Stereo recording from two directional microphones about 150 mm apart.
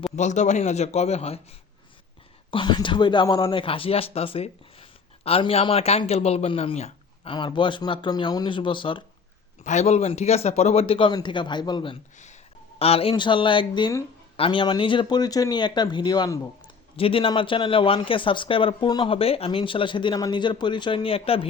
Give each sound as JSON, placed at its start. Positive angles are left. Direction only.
{"t": 0.2, "sound": "a man's voice", "side_deg": 55}
{"t": 2.5, "sound": "speech", "side_deg": 35}
{"t": 7.3, "sound": "speech", "side_deg": 30}
{"t": 9.6, "sound": "speech", "side_deg": 50}
{"t": 12.1, "sound": "speech", "side_deg": 50}
{"t": 12.8, "sound": "speech", "side_deg": 40}
{"t": 17.0, "sound": "speech", "side_deg": 35}